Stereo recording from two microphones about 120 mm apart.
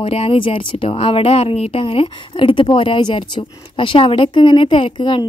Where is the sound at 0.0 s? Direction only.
55° left (ahead or behind).